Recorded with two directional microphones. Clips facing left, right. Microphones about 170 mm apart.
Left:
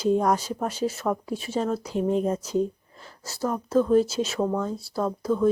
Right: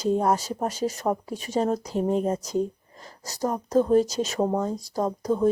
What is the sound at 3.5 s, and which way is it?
Speech, 40° right (ahead or behind).